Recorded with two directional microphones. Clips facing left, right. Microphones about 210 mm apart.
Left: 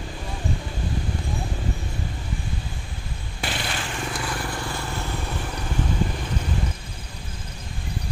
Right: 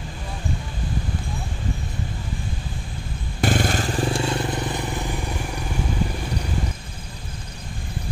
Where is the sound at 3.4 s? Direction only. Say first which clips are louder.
Right 9 dB; 45° right (ahead or behind); by 5.1 s 15° right (ahead or behind).